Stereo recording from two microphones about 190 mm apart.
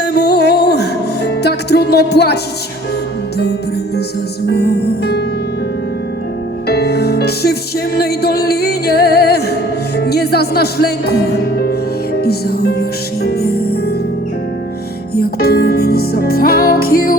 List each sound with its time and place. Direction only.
0.0 s music: 60° left (ahead or behind)
4.5 s music: 60° left (ahead or behind)
6.7 s music: 55° left (ahead or behind)
15.1 s music: 55° left (ahead or behind)